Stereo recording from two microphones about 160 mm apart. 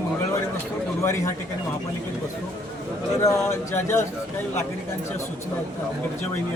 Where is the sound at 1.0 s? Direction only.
15° left (ahead or behind).